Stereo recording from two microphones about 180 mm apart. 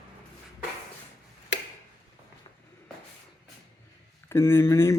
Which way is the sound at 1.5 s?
80° left.